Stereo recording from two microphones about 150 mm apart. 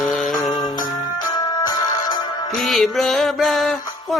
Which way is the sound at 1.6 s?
25° left (ahead or behind).